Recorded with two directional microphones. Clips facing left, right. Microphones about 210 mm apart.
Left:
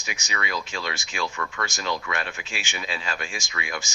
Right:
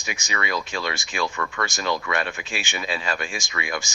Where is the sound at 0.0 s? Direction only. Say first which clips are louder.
Right 3 dB; 55° right (ahead or behind).